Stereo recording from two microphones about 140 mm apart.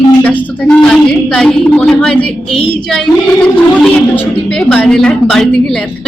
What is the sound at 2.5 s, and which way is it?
Speech, 40° left (ahead or behind).